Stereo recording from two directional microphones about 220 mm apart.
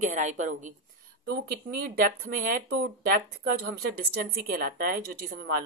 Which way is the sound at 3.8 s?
45° right (ahead or behind).